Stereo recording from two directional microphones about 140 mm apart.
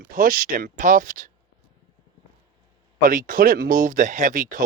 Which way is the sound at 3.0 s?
75° right (ahead or behind).